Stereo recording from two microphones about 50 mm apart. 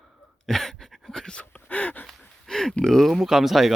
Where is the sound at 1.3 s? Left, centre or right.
Left.